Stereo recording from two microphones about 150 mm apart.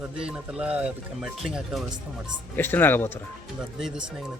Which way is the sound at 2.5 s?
15° left (ahead or behind).